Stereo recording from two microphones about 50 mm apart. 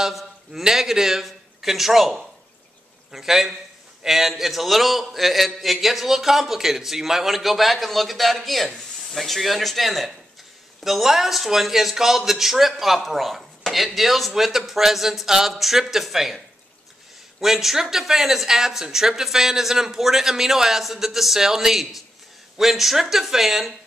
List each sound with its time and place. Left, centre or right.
0.0 s a man's voice: centre
17.4 s a man's voice: centre